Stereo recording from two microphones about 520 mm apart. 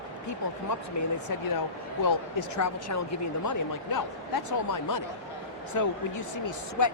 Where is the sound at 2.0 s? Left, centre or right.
Left.